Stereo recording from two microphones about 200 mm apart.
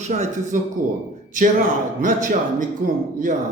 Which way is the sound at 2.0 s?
40° right (ahead or behind).